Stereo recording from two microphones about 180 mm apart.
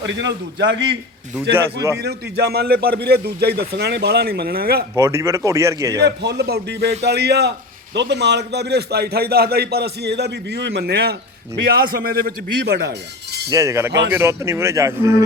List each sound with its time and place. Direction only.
1.5 s speech: 15° right (ahead or behind)
2.0 s a man's voice: 65° right (ahead or behind)
4.9 s speech: 15° right (ahead or behind)
6.0 s a man's voice: 70° right (ahead or behind)
13.5 s speech: 15° right (ahead or behind)